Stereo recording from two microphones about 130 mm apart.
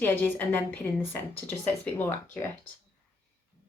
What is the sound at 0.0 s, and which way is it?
A woman's voice, 15° left (ahead or behind).